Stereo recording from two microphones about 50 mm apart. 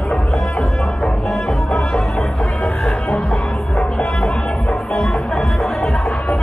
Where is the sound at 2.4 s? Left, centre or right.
Left.